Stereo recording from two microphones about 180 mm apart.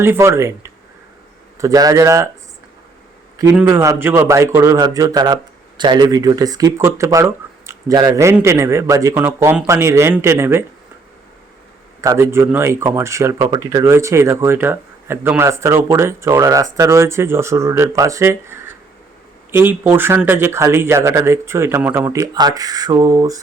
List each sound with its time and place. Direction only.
0.0 s speech: 15° right (ahead or behind)
3.5 s speech: 10° right (ahead or behind)
12.0 s speech: 15° right (ahead or behind)